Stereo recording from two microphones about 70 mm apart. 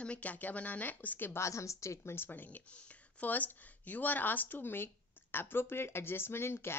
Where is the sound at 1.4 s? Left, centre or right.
Left.